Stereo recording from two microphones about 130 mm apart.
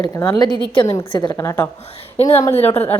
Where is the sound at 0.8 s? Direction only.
40° left (ahead or behind).